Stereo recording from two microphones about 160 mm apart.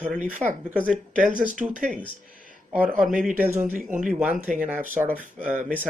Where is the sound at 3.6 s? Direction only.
55° right (ahead or behind).